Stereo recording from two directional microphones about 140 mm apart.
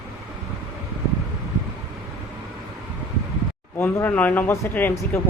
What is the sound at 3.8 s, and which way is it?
Speech, 15° left (ahead or behind).